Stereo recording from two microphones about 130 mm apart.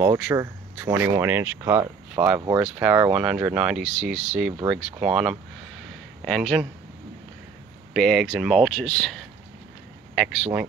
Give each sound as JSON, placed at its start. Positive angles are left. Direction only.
{"t": 0.0, "sound": "speech", "side_deg": -15}
{"t": 7.9, "sound": "speech", "side_deg": 0}